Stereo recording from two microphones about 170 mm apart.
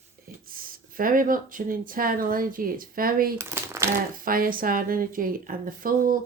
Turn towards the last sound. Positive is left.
turn(degrees=-55)  # may be behind; listen again after turning